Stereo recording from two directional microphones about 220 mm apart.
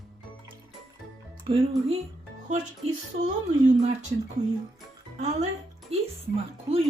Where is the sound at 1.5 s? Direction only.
25° right (ahead or behind).